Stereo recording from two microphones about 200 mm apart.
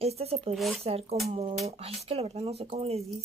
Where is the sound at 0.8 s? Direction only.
30° right (ahead or behind).